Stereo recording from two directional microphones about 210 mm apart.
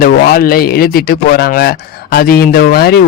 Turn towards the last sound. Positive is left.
turn(degrees=45)  # may be behind; listen again after turning